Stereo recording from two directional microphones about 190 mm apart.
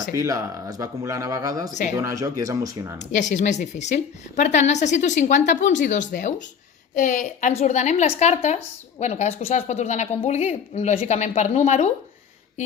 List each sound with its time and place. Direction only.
0.1 s speech: 20° right (ahead or behind)
3.0 s a woman's voice: 40° left (ahead or behind)